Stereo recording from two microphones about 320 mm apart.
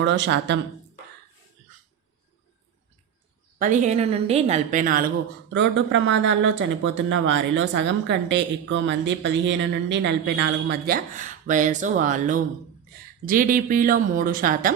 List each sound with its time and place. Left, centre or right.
0.0 s speech: right
3.6 s speech: right
5.5 s speech: right